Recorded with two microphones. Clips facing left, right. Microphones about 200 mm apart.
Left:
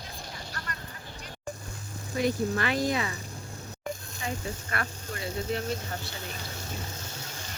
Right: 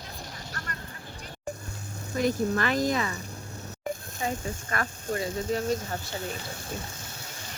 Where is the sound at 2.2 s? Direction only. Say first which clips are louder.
Right 2 dB; 45° right (ahead or behind).